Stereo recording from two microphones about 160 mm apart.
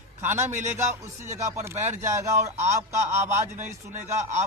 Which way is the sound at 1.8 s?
50° right (ahead or behind).